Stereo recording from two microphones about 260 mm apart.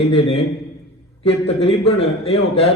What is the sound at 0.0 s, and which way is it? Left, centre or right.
A man's voice, left.